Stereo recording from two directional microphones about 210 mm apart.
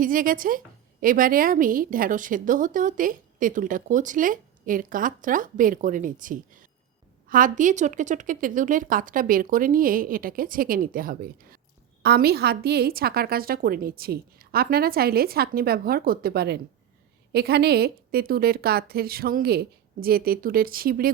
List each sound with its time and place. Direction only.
0.0 s a woman's voice: 40° right (ahead or behind)